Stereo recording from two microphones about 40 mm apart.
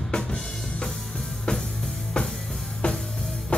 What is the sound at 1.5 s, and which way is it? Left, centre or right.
Music, left.